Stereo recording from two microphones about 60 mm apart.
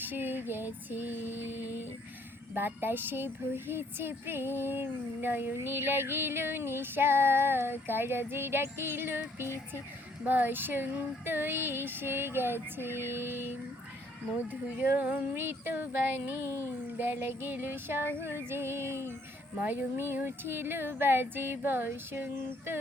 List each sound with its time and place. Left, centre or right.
0.0 s a sound: right
2.6 s female singing: right
10.2 s female singing: right
14.5 s speech: right
15.4 s female singing: right
19.6 s female singing: right